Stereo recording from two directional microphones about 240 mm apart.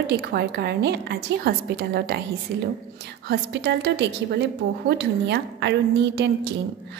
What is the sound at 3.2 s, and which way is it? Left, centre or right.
A woman's voice, right.